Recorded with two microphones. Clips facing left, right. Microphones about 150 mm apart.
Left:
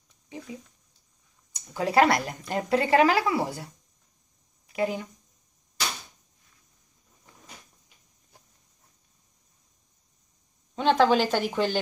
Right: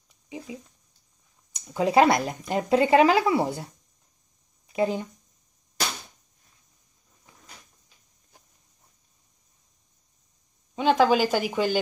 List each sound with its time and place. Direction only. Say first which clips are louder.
0.3 s speech: right 2 dB; 15° right (ahead or behind)
4.7 s speech: right 3 dB; 30° right (ahead or behind)
10.8 s speech: right 1 dB; 10° right (ahead or behind)